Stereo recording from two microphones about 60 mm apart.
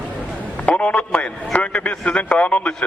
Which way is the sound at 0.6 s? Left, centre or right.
Left.